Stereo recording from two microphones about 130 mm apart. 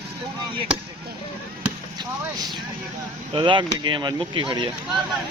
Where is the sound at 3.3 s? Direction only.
40° right (ahead or behind).